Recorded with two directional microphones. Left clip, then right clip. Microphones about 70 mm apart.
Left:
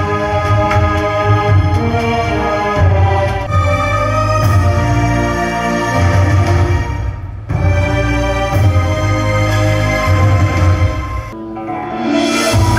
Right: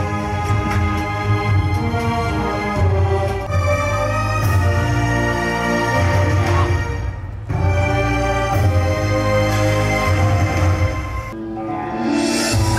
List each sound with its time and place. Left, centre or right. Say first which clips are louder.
0.1 s music: left 8 dB; left
7.8 s music: left 2 dB; centre
12.0 s music: left 6 dB; left